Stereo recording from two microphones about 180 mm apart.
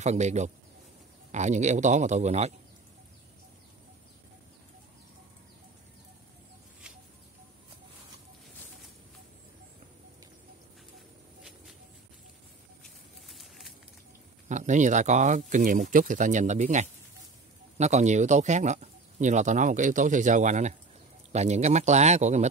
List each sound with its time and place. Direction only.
0.0 s speech: 40° right (ahead or behind)
13.3 s a sound: centre (ahead or behind)
14.5 s speech: 45° right (ahead or behind)